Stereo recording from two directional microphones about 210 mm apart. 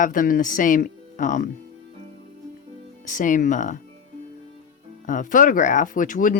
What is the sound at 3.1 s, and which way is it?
Speech, 40° left (ahead or behind).